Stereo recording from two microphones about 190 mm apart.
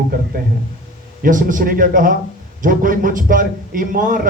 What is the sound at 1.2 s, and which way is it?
A man's voice, 45° right (ahead or behind).